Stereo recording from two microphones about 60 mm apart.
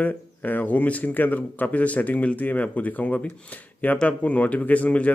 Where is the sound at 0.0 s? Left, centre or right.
Left.